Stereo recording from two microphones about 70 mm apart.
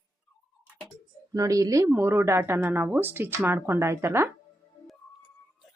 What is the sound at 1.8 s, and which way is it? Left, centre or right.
Speech, right.